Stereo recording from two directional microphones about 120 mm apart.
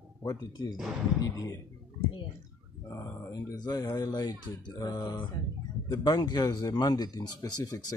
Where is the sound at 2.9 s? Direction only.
30° left (ahead or behind).